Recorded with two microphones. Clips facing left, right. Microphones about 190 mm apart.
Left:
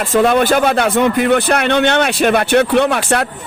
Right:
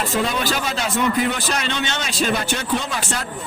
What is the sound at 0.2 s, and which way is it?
A man's voice, 55° left (ahead or behind).